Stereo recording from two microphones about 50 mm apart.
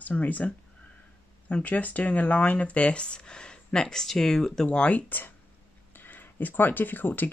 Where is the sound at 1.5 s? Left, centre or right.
Left; by 4.6 s centre.